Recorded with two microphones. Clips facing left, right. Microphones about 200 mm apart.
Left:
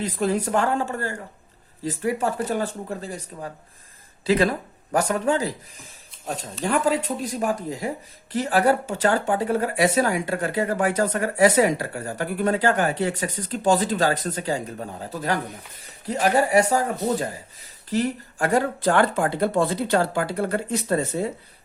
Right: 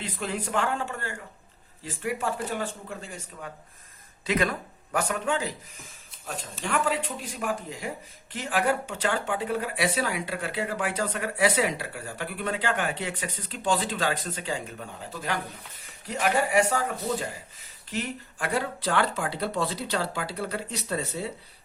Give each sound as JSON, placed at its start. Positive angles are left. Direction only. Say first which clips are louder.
{"t": 0.0, "sound": "speech", "louder": "left 9 dB", "side_deg": 40}